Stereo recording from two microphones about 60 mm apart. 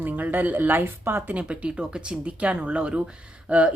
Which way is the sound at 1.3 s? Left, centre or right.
Right.